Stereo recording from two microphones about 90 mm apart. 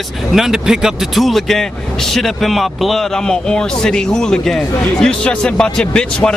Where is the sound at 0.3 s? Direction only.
5° right (ahead or behind).